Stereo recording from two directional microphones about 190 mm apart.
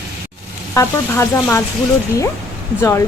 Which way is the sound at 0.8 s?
15° left (ahead or behind).